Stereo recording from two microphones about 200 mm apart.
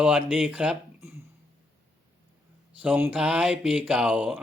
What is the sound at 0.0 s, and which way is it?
Speech, 5° right (ahead or behind).